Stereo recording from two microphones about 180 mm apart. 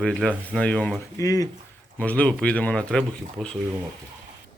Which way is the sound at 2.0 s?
5° left (ahead or behind).